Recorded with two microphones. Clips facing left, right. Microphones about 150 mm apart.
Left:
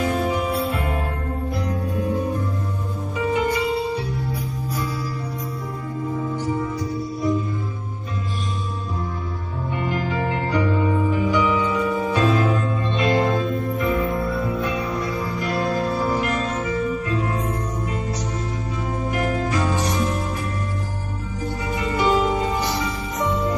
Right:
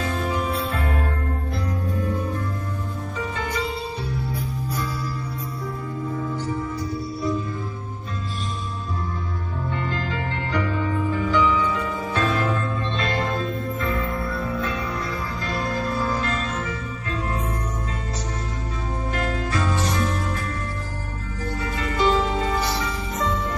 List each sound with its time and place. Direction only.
0.0 s music: 15° left (ahead or behind)
3.2 s music: 15° left (ahead or behind)
9.7 s music: 15° left (ahead or behind)
19.1 s music: 15° left (ahead or behind)
21.7 s music: 15° left (ahead or behind)